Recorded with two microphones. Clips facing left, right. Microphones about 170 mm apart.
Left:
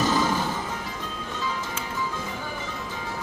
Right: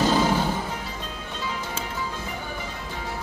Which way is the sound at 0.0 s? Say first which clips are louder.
Right 2 dB; 25° right (ahead or behind).